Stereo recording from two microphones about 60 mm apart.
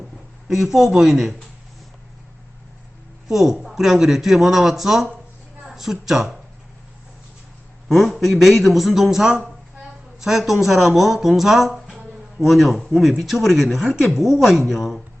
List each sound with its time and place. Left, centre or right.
0.4 s speech: centre
3.2 s speech: centre
7.9 s speech: centre